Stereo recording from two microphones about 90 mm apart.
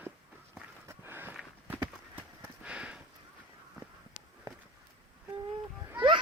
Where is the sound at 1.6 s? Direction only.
20° right (ahead or behind).